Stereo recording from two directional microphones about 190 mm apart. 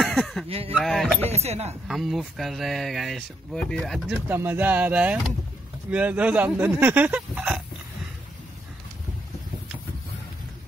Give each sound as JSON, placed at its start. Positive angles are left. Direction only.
{"t": 0.0, "sound": "a sound", "side_deg": 0}
{"t": 0.7, "sound": "speech", "side_deg": 0}
{"t": 1.3, "sound": "speech", "side_deg": -35}
{"t": 1.9, "sound": "speech", "side_deg": 0}
{"t": 4.3, "sound": "speech", "side_deg": -10}